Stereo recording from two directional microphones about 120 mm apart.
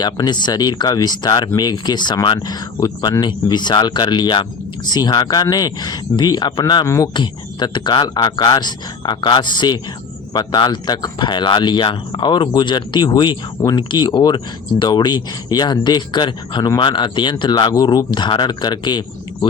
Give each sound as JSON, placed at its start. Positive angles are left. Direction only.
{"t": 0.0, "sound": "speech", "side_deg": 35}
{"t": 6.8, "sound": "speech", "side_deg": 25}
{"t": 7.1, "sound": "speech", "side_deg": 40}